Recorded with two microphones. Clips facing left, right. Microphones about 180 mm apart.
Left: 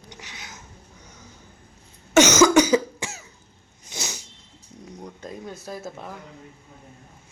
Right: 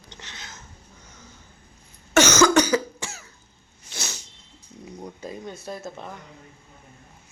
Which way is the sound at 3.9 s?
15° left (ahead or behind).